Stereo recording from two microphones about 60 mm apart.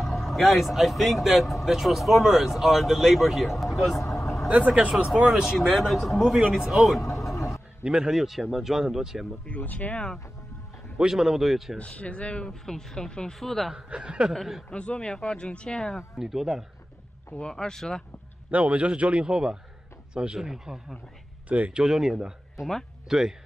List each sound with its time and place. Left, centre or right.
0.0 s speech: centre
4.5 s a man's voice: right; by 9.3 s centre
9.5 s speech: left
11.0 s speech: centre
11.8 s speech: centre
13.7 s speech: centre
14.3 s speech: centre
14.7 s speech: centre
16.2 s speech: centre
17.4 s speech: centre
18.5 s a man's voice: right
21.5 s a man's voice: right
21.8 s speech: centre
23.0 s speech: centre